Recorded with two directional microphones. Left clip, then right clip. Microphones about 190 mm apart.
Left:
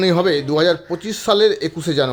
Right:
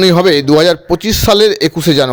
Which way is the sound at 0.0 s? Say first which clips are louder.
Right 7 dB; 40° right (ahead or behind).